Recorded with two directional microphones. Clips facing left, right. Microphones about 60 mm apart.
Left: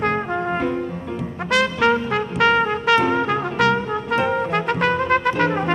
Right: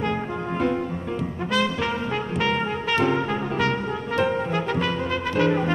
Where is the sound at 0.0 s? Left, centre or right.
Left.